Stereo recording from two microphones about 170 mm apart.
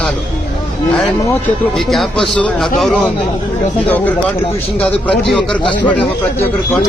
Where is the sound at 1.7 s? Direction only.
Centre (ahead or behind).